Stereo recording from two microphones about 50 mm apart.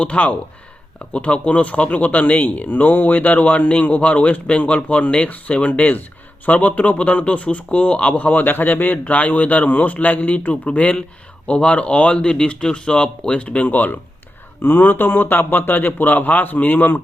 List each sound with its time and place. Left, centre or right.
0.0 s speech: left
13.7 s speech: left